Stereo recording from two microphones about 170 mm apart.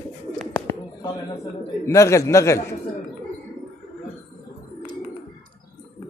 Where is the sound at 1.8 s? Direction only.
15° left (ahead or behind).